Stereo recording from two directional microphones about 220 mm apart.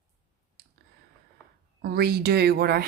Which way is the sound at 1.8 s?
45° right (ahead or behind).